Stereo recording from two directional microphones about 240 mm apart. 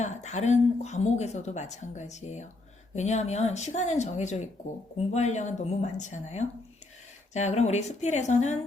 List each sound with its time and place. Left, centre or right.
0.0 s a woman's voice: left